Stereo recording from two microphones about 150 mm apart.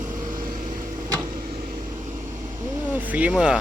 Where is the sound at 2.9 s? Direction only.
10° right (ahead or behind).